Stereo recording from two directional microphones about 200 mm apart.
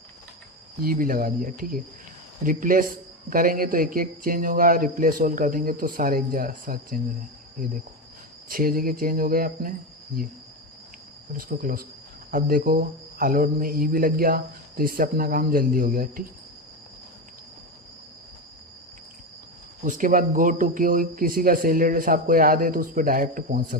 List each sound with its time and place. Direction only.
0.8 s speech: 45° right (ahead or behind)
8.4 s speech: 45° right (ahead or behind)
11.3 s speech: 45° right (ahead or behind)
19.8 s speech: 40° right (ahead or behind)